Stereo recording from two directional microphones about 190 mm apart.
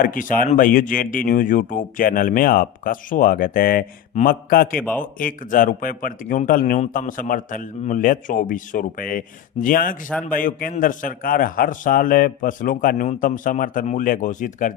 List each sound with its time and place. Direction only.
0.0 s speech: 45° left (ahead or behind)
4.8 s speech: 10° left (ahead or behind)
5.2 s speech: 45° left (ahead or behind)